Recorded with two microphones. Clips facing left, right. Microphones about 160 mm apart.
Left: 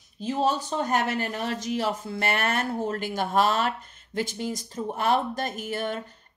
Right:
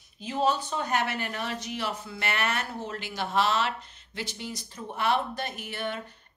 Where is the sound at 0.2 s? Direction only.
40° left (ahead or behind).